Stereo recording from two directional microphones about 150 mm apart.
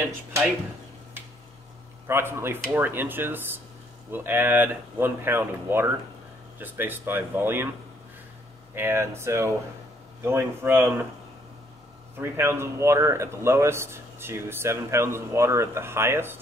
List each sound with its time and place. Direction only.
2.0 s speech: 15° right (ahead or behind)
8.7 s speech: 15° right (ahead or behind)
12.2 s speech: 15° right (ahead or behind)